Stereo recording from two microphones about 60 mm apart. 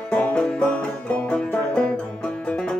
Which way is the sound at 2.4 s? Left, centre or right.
Centre.